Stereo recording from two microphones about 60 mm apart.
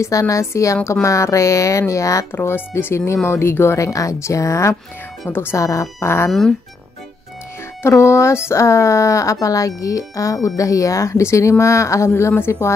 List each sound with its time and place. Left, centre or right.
0.0 s speech: left
2.3 s speech: left
3.8 s speech: left
5.3 s speech: left
5.6 s speech: left
5.9 s speech: left
7.8 s speech: left
12.2 s speech: left